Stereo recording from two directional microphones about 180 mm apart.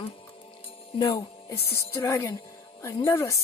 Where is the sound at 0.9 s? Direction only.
20° left (ahead or behind).